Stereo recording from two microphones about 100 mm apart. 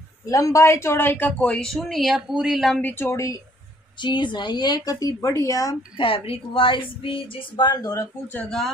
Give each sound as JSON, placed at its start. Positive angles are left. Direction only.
{"t": 0.3, "sound": "speech", "side_deg": 35}
{"t": 1.8, "sound": "speech", "side_deg": 0}
{"t": 2.8, "sound": "speech", "side_deg": 20}
{"t": 4.0, "sound": "a woman's voice", "side_deg": 50}
{"t": 5.9, "sound": "speech", "side_deg": 65}
{"t": 8.5, "sound": "speech", "side_deg": 5}